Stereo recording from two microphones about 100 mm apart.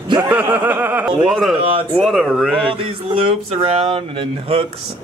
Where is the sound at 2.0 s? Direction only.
Centre (ahead or behind).